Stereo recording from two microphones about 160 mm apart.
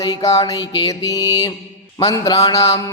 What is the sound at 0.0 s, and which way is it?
Music, 20° left (ahead or behind).